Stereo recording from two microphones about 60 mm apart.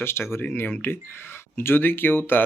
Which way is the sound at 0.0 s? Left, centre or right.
Left.